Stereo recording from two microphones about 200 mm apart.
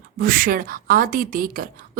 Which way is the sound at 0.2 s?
45° right (ahead or behind).